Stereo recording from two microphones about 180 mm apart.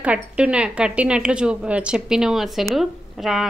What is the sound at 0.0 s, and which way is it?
A woman's voice, 5° right (ahead or behind).